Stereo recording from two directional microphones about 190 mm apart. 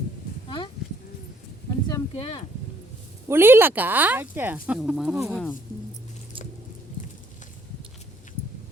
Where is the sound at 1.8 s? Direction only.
20° left (ahead or behind).